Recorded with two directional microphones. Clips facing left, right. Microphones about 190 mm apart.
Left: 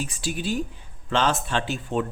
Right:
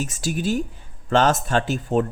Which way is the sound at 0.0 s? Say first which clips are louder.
Right 4 dB; 45° right (ahead or behind).